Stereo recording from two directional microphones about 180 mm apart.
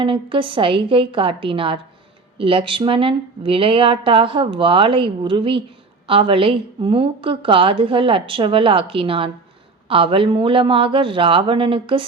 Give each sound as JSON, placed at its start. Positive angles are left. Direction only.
{"t": 0.0, "sound": "a woman's voice", "side_deg": -30}